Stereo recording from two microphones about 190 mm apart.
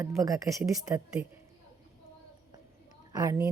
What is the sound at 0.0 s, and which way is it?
A woman's voice, 15° right (ahead or behind).